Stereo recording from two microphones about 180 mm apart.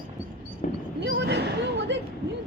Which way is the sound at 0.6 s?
45° left (ahead or behind).